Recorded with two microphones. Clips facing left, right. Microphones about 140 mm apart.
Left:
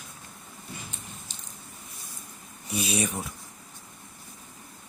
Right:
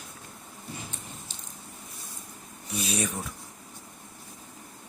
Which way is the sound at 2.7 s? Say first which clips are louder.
Left 2 dB; 5° left (ahead or behind).